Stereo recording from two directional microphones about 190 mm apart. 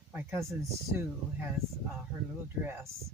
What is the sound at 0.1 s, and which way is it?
Speech, 10° right (ahead or behind).